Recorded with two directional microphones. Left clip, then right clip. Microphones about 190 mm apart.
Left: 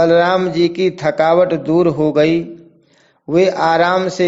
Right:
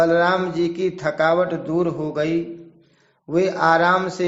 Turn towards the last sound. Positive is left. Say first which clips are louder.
# left 3 dB
turn(degrees=30)  # may be behind; listen again after turning